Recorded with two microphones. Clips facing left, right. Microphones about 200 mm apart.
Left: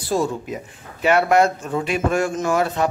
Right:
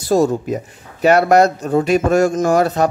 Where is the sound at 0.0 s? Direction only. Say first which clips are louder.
Right 7 dB; 45° right (ahead or behind).